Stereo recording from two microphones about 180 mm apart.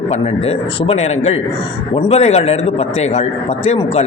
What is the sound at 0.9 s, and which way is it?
A man's voice, 35° left (ahead or behind).